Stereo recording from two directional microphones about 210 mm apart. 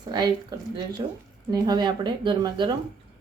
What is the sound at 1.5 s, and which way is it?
Speech, 20° right (ahead or behind).